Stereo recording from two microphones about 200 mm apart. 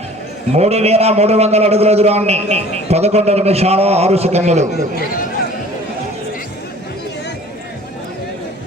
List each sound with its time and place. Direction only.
0.5 s a man's voice: 30° right (ahead or behind)